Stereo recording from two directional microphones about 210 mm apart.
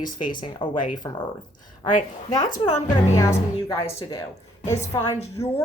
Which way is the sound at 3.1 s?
15° left (ahead or behind).